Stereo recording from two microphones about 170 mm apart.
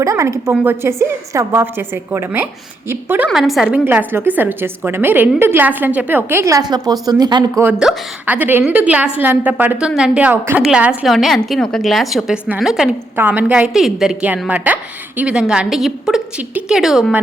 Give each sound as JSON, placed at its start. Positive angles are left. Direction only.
{"t": 0.0, "sound": "a woman's voice", "side_deg": -20}
{"t": 3.2, "sound": "a woman's voice", "side_deg": 0}
{"t": 3.8, "sound": "a woman's voice", "side_deg": -15}
{"t": 7.6, "sound": "a woman's voice", "side_deg": -5}